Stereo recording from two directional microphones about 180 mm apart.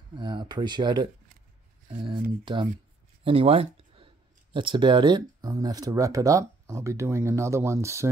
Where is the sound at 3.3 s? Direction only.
35° right (ahead or behind); by 8.1 s 15° right (ahead or behind).